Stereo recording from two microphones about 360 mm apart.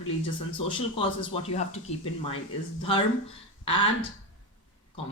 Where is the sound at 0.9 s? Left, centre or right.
Centre.